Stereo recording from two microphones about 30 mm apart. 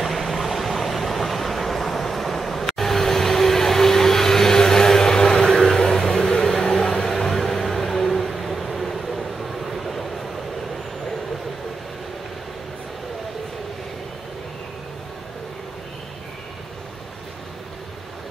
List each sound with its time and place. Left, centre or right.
0.0 s vehicle: centre
5.6 s a sound: centre
7.2 s music: centre